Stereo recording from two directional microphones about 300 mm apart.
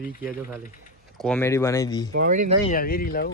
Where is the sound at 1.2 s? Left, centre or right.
Centre.